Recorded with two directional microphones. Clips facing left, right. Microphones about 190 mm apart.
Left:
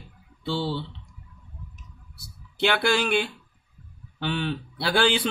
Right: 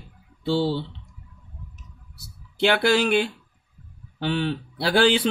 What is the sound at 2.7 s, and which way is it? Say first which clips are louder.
A man's voice: right 3 dB; 40° right (ahead or behind).